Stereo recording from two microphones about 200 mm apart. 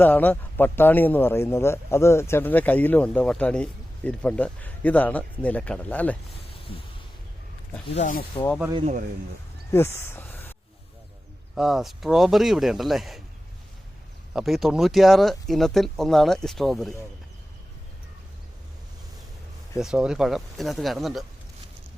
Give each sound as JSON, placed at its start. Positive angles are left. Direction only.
{"t": 0.0, "sound": "a man's voice", "side_deg": 10}
{"t": 7.9, "sound": "speech", "side_deg": 40}
{"t": 8.7, "sound": "speech", "side_deg": -30}
{"t": 10.0, "sound": "a sound", "side_deg": 10}
{"t": 11.5, "sound": "speech", "side_deg": 0}
{"t": 14.3, "sound": "speech", "side_deg": 0}
{"t": 19.8, "sound": "speech", "side_deg": -5}